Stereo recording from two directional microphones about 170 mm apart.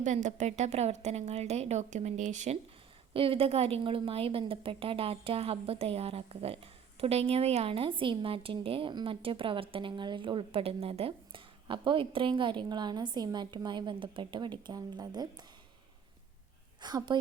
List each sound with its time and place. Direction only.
0.0 s a woman's voice: 45° right (ahead or behind)
3.1 s a woman's voice: 30° right (ahead or behind)
16.8 s a woman's voice: 25° right (ahead or behind)